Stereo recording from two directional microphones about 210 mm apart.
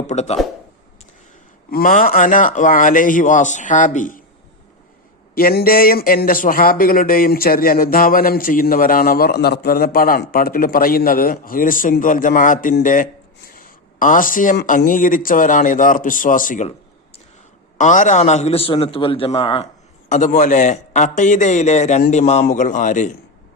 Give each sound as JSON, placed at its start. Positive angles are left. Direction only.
{"t": 0.1, "sound": "speech", "side_deg": 30}
{"t": 1.7, "sound": "speech", "side_deg": 40}
{"t": 5.3, "sound": "speech", "side_deg": 45}
{"t": 17.7, "sound": "a man's voice", "side_deg": 35}